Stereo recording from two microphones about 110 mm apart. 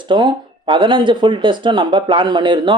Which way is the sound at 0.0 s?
45° right (ahead or behind).